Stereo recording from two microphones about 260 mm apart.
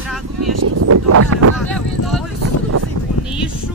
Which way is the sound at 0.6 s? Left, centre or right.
Right.